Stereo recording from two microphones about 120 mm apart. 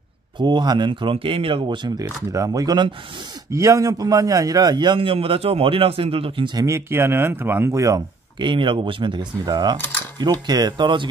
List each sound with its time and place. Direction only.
0.4 s speech: 40° right (ahead or behind)
2.3 s a man's voice: 30° right (ahead or behind); by 6.6 s 45° right (ahead or behind)
6.6 s speech: 20° right (ahead or behind)
8.4 s speech: 45° right (ahead or behind)